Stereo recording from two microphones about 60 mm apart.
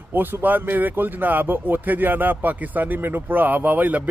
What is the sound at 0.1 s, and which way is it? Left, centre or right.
A man's voice, right.